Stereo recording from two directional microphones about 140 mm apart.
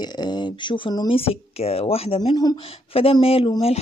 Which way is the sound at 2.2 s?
30° left (ahead or behind).